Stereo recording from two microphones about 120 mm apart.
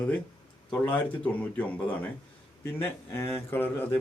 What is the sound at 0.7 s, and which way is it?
Speech, 15° left (ahead or behind).